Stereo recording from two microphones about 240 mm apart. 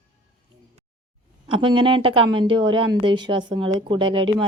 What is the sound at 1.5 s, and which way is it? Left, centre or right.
A woman's voice, right.